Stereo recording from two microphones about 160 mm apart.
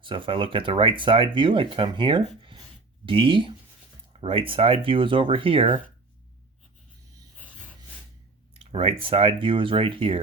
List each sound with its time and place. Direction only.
0.0 s speech: 30° right (ahead or behind)
8.5 s speech: 35° right (ahead or behind)